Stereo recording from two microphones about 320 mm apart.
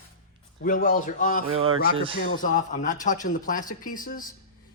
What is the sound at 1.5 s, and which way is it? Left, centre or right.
Speech, right.